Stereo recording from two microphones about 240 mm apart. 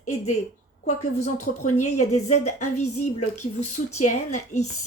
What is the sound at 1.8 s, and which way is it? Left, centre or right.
Speech, left.